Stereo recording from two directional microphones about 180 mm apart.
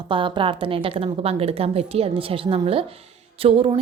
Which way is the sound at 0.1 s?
30° right (ahead or behind).